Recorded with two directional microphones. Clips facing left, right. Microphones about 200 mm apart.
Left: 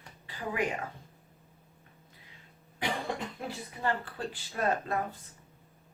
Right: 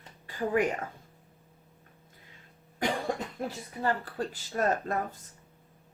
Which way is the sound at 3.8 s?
40° right (ahead or behind).